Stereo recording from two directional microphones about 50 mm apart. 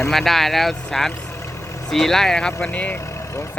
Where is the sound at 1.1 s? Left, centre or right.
Left.